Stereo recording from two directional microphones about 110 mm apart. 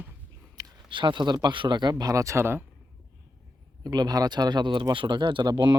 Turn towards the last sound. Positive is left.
turn(degrees=-40)  # may be behind; listen again after turning